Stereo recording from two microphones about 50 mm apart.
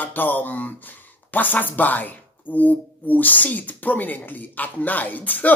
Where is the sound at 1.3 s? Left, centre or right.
Left.